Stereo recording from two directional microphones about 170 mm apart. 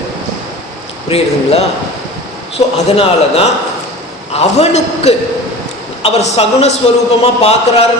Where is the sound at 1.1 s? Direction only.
35° left (ahead or behind).